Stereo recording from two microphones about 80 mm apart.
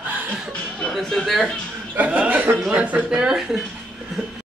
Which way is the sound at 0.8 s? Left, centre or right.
Centre.